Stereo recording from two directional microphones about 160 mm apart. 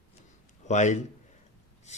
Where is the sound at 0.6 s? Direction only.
45° left (ahead or behind).